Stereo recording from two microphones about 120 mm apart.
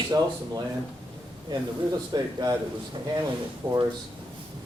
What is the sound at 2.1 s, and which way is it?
Speech, 35° right (ahead or behind).